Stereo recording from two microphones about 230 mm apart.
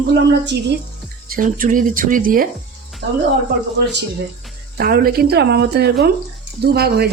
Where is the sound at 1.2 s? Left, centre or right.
Right.